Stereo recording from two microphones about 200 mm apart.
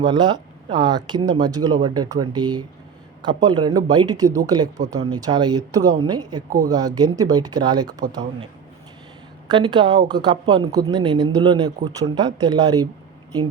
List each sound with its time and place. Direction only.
0.0 s speech: 20° right (ahead or behind)
9.5 s speech: 20° right (ahead or behind)